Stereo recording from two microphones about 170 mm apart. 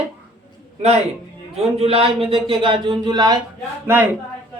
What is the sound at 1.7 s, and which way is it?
A man's voice, 35° right (ahead or behind).